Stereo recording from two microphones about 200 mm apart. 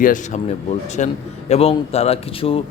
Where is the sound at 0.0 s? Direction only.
40° left (ahead or behind).